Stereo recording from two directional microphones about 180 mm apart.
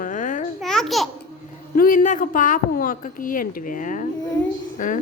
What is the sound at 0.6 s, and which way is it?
Babbling, centre (ahead or behind).